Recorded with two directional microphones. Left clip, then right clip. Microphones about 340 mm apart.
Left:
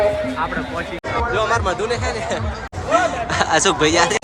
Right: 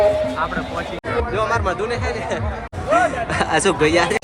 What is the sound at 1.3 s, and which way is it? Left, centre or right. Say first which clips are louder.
Speech: left 1 dB; centre.